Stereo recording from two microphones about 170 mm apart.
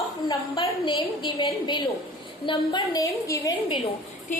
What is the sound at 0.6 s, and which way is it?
A woman's voice, 25° left (ahead or behind).